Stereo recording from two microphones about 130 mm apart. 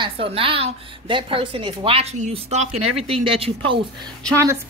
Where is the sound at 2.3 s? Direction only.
55° right (ahead or behind).